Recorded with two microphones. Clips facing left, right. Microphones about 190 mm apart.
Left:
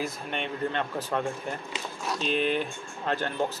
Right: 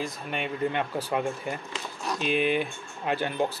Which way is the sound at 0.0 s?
5° right (ahead or behind).